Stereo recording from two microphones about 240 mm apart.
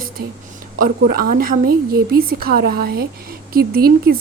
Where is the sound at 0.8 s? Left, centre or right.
Right.